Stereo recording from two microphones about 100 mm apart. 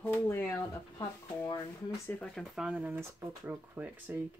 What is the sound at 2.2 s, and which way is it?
Speech, 5° left (ahead or behind).